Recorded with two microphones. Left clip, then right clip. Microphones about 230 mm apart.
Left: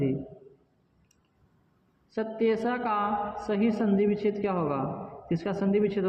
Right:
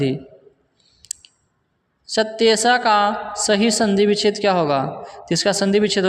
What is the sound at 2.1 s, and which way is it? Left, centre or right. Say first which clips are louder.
A man's voice: right 11 dB; right.